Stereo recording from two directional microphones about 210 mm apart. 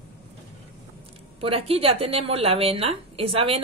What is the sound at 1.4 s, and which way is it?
A woman's voice, 25° right (ahead or behind).